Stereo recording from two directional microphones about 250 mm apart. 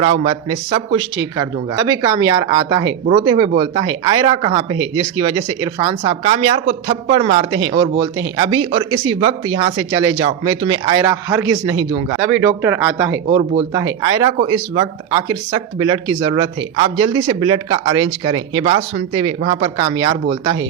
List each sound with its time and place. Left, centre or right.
0.0 s speech: right